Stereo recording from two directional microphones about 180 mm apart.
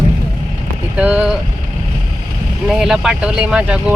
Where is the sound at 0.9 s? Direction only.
10° right (ahead or behind).